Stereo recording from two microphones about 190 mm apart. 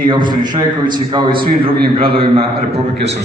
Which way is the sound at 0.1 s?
25° right (ahead or behind).